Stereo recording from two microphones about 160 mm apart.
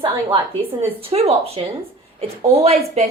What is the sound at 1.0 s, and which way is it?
A woman's voice, 40° right (ahead or behind).